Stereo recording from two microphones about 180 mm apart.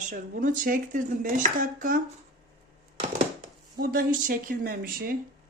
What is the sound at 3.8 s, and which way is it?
Speech, 50° right (ahead or behind).